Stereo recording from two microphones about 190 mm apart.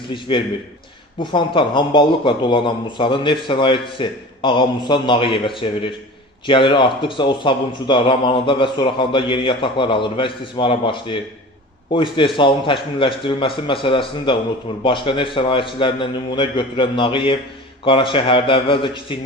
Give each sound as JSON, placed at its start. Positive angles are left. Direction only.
{"t": 0.1, "sound": "a man's voice", "side_deg": 25}